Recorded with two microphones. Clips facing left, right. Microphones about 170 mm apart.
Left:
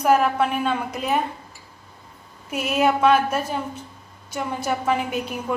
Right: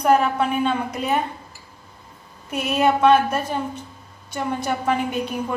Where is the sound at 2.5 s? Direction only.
5° left (ahead or behind).